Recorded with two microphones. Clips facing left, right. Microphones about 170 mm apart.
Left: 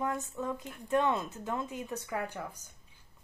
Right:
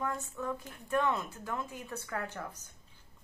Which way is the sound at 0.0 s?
20° left (ahead or behind).